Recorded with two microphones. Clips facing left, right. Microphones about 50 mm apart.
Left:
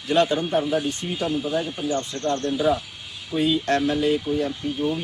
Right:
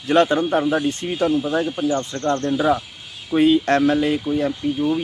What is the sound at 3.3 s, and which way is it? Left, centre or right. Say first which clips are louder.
Speech: right 7 dB; right.